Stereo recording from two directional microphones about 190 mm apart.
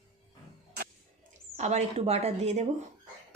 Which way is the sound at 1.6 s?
35° right (ahead or behind).